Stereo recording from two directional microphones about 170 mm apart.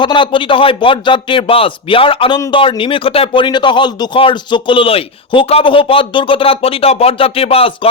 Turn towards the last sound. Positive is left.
turn(degrees=35)  # may be behind; listen again after turning